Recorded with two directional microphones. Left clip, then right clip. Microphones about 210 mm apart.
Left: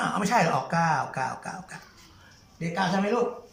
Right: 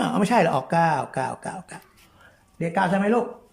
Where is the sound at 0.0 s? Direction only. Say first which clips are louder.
Right 3 dB; 25° right (ahead or behind).